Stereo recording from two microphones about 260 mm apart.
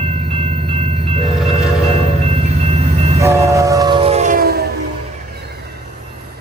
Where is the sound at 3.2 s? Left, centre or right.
Centre; by 4.7 s right.